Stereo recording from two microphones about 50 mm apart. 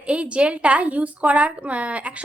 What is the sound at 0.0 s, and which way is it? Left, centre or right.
A woman's voice, right.